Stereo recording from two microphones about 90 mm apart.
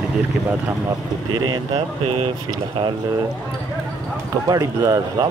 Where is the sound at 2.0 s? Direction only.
80° right.